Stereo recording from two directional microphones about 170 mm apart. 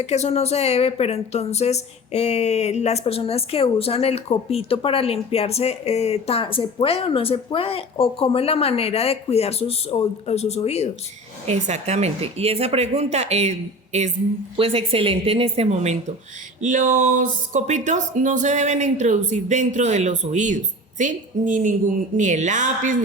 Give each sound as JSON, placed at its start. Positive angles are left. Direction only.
{"t": 0.0, "sound": "a woman's voice", "side_deg": 40}
{"t": 11.4, "sound": "speech", "side_deg": -40}